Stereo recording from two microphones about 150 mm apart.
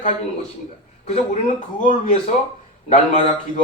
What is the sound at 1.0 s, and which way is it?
Speech, 50° left (ahead or behind).